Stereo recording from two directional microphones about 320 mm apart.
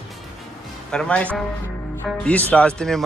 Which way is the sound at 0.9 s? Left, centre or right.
Centre.